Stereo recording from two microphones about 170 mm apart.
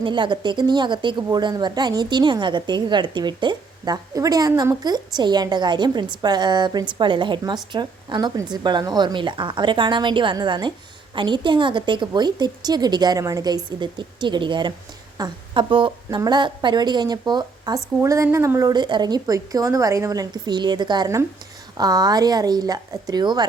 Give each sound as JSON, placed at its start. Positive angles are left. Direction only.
{"t": 0.0, "sound": "a woman's voice", "side_deg": -30}